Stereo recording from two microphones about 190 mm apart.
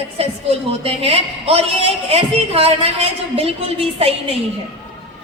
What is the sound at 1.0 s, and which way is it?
A woman's voice, 30° right (ahead or behind).